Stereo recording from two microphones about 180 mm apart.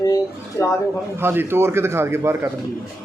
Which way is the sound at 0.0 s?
20° left (ahead or behind).